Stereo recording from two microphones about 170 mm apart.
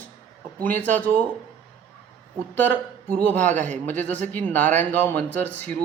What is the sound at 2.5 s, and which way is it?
Speech, 10° left (ahead or behind).